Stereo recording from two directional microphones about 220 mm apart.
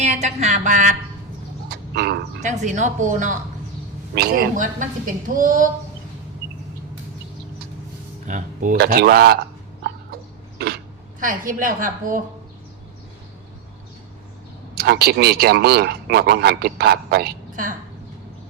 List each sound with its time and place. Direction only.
0.0 s a woman's voice: 30° right (ahead or behind)
1.7 s bird: 45° right (ahead or behind)
2.4 s a woman's voice: 35° right (ahead or behind)
4.1 s a woman's voice: 45° right (ahead or behind)
8.3 s a man's voice: 35° right (ahead or behind)
11.2 s a woman's voice: 40° right (ahead or behind)
14.8 s a man's voice: 45° right (ahead or behind)